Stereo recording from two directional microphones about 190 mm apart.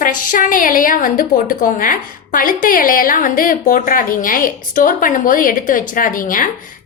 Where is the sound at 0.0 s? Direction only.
45° left (ahead or behind).